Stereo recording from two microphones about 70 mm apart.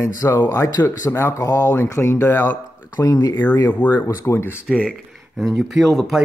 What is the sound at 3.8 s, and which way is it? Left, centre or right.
Speech, left.